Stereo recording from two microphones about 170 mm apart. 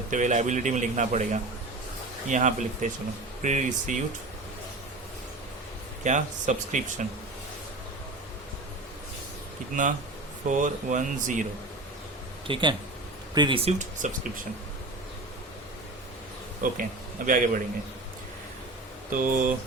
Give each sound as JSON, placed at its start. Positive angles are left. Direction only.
{"t": 0.1, "sound": "a man's voice", "side_deg": -45}
{"t": 6.0, "sound": "a man's voice", "side_deg": -45}
{"t": 9.8, "sound": "a man's voice", "side_deg": -50}
{"t": 12.5, "sound": "speech", "side_deg": -30}
{"t": 16.6, "sound": "a man's voice", "side_deg": -50}
{"t": 19.1, "sound": "a man's voice", "side_deg": -55}